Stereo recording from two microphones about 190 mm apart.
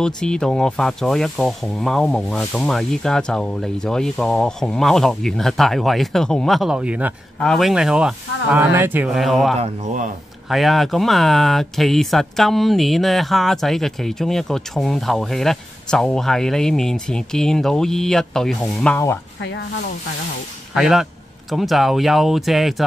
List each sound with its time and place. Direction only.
0.0 s speech: 5° left (ahead or behind)
9.6 s speech: 40° right (ahead or behind)
10.5 s speech: centre (ahead or behind)
20.7 s speech: 5° right (ahead or behind)